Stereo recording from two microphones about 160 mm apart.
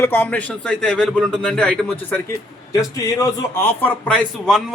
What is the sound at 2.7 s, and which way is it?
A man's voice, 20° left (ahead or behind).